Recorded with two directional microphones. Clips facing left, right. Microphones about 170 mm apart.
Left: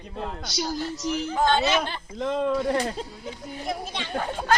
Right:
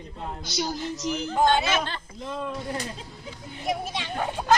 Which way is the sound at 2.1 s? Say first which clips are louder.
Left 10 dB; 80° left.